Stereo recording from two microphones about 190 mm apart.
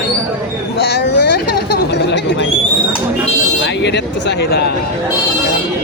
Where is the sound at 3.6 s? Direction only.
65° left (ahead or behind).